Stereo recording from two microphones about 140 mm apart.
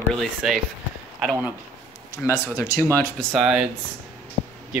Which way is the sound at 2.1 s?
20° left (ahead or behind).